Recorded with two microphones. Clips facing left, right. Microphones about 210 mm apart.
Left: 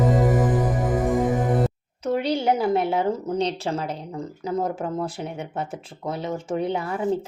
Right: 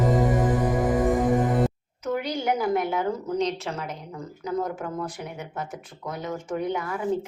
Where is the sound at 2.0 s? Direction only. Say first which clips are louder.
Left 4 dB; 30° left (ahead or behind).